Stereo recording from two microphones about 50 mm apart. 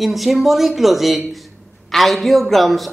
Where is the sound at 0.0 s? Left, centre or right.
Centre.